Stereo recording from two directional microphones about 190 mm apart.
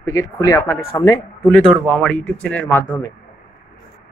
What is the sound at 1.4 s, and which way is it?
Speech, 5° left (ahead or behind).